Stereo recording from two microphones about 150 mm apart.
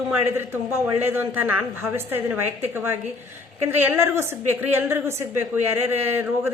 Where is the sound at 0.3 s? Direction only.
15° right (ahead or behind).